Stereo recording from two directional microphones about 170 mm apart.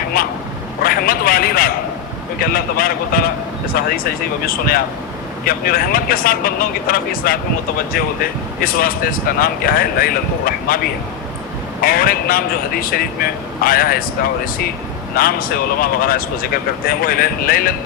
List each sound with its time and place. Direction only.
0.1 s a sound: 60° left (ahead or behind)
2.4 s speech: 60° left (ahead or behind)
11.8 s speech: 60° left (ahead or behind)
15.2 s speech: 60° left (ahead or behind)